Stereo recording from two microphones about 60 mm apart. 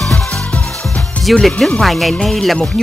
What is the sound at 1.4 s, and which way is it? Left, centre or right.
Speech, centre.